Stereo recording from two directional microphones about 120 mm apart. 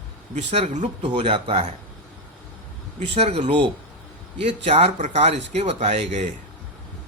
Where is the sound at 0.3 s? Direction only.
75° right (ahead or behind).